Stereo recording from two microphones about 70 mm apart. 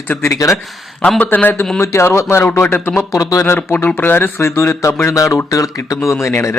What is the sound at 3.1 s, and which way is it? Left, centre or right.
Speech, left.